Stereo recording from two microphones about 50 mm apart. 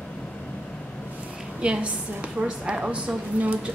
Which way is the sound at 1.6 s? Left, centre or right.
Right.